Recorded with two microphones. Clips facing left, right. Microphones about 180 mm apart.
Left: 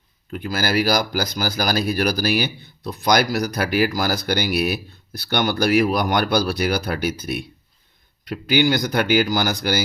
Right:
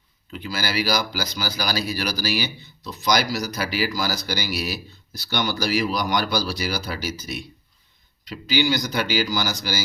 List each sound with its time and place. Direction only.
0.3 s speech: 50° left (ahead or behind)